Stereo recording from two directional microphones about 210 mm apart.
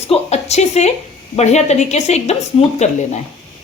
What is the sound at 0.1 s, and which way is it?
A woman's voice, 30° left (ahead or behind).